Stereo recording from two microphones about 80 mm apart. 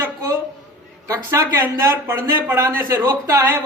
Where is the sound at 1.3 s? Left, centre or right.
Right.